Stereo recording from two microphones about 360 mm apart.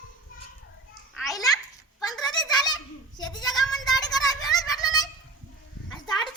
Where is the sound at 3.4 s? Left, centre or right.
Centre.